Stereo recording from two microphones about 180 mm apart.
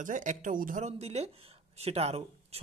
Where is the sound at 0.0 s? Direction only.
45° right (ahead or behind).